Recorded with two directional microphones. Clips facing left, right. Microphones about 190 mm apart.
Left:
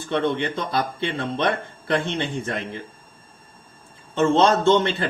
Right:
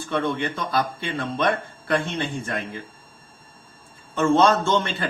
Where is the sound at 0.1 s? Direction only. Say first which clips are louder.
Left 2 dB; 25° left (ahead or behind).